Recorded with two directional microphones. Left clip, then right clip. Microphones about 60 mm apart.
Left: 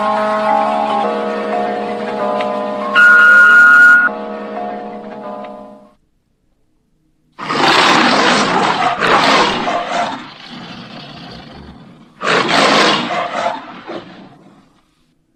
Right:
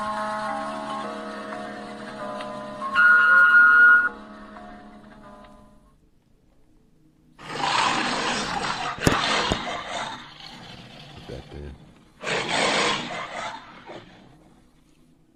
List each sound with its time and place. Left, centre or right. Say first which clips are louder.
0.0 s music: left 13 dB; left
7.3 s roar: left 12 dB; left